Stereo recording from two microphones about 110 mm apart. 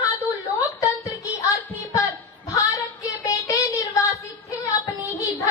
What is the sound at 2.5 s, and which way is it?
Female singing, 30° left (ahead or behind).